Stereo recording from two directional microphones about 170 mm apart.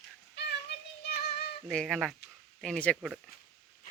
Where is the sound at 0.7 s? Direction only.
75° left (ahead or behind).